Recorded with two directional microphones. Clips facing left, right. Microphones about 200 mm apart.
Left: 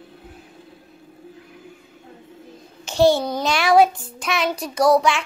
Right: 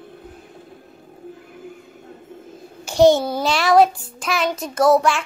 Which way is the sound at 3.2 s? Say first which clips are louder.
Right 1 dB; 5° right (ahead or behind).